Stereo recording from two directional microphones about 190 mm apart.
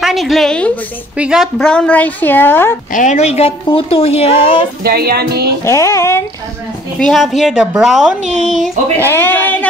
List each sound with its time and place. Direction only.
0.0 s a woman's voice: centre (ahead or behind)
2.9 s a woman's voice: 40° left (ahead or behind)
4.8 s music: 55° right (ahead or behind)
5.7 s a woman's voice: 15° left (ahead or behind)
7.0 s a woman's voice: centre (ahead or behind)
8.2 s speech: 40° right (ahead or behind)
8.5 s a woman's voice: centre (ahead or behind)
9.0 s a woman's voice: 10° left (ahead or behind)